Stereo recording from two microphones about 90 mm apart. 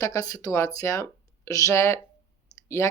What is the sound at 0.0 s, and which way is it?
Speech, 40° left (ahead or behind).